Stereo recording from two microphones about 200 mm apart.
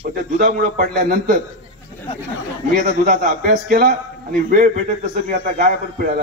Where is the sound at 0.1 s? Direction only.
45° right (ahead or behind).